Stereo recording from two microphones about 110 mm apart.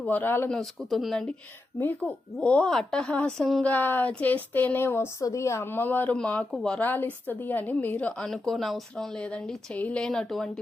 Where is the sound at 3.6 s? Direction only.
15° left (ahead or behind).